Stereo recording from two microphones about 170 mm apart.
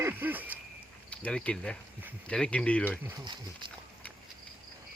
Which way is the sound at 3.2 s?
25° right (ahead or behind).